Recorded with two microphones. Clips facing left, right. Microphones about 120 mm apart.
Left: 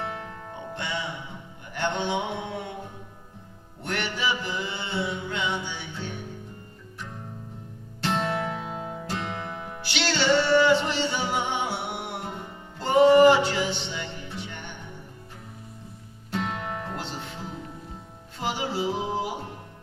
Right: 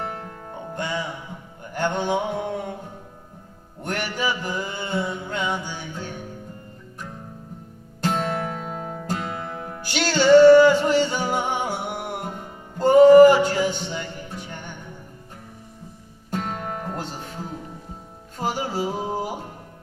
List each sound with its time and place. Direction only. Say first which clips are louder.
0.0 s music: right 2 dB; 45° right (ahead or behind)
1.7 s a sound: right 4 dB; 45° right (ahead or behind)
3.8 s music: right 2 dB; 45° right (ahead or behind)
8.0 s music: right 2 dB; 45° right (ahead or behind)
16.3 s music: right 2 dB; 45° right (ahead or behind)